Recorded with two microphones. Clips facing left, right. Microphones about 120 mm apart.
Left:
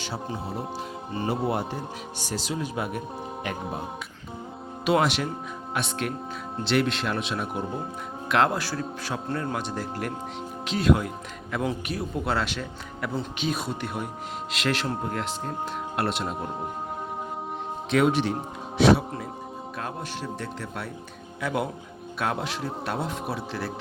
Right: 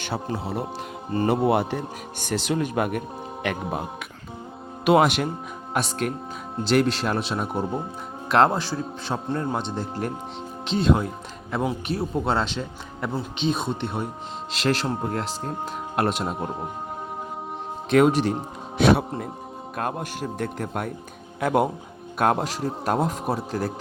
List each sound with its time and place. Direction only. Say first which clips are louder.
0.0 s speech: right 4 dB; 60° right (ahead or behind)
3.4 s music: right 6 dB; 75° right (ahead or behind)
4.9 s a man's voice: right 5 dB; 55° right (ahead or behind); by 8.5 s 35° right (ahead or behind)
8.5 s a man's voice: right 2 dB; 20° right (ahead or behind); by 16.3 s 45° right (ahead or behind)
17.9 s a man's voice: right 4 dB; 45° right (ahead or behind)
18.8 s a man's voice: right 1 dB; 55° right (ahead or behind)